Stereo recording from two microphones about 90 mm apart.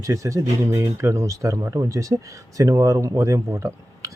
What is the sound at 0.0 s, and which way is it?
A man's voice, 35° right (ahead or behind).